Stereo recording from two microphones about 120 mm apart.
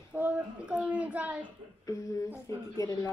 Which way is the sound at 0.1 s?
10° right (ahead or behind).